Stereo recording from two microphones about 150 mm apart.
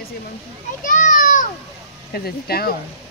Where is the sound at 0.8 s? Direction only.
60° left (ahead or behind).